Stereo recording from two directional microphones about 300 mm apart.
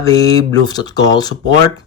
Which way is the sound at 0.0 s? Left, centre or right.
Centre.